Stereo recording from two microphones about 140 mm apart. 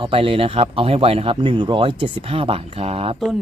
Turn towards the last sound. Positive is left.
turn(degrees=-45)  # may be behind; listen again after turning